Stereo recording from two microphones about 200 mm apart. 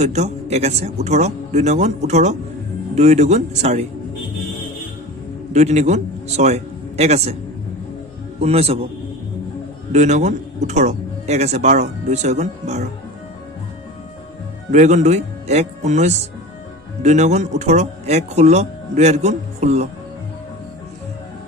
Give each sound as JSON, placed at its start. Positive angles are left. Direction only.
{"t": 0.0, "sound": "speech", "side_deg": -35}
{"t": 5.5, "sound": "a man's voice", "side_deg": -35}
{"t": 8.4, "sound": "a man's voice", "side_deg": -30}
{"t": 9.9, "sound": "speech", "side_deg": -35}
{"t": 14.7, "sound": "speech", "side_deg": -35}